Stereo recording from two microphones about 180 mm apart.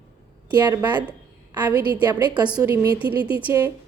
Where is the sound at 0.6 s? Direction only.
20° right (ahead or behind).